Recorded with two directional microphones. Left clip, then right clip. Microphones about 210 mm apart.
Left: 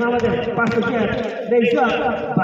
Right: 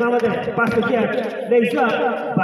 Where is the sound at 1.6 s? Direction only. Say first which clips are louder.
Left 2 dB; 30° right (ahead or behind).